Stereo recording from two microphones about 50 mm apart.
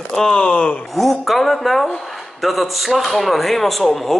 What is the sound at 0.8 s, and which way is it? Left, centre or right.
A woman's voice, centre.